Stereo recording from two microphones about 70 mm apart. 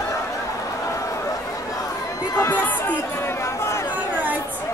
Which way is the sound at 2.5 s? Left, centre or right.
Left.